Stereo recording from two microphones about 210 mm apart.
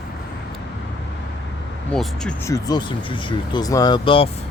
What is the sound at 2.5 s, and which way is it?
Speech, 20° left (ahead or behind).